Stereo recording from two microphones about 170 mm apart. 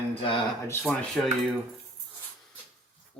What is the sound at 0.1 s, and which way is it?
Speech, 30° left (ahead or behind).